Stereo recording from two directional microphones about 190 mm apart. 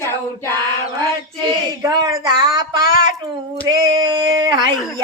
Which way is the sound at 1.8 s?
20° right (ahead or behind).